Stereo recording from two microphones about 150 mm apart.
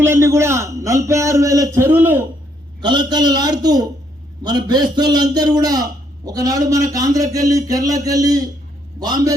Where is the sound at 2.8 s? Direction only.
30° right (ahead or behind).